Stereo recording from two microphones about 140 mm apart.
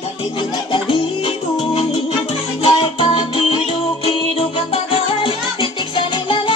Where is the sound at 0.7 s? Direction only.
40° left (ahead or behind).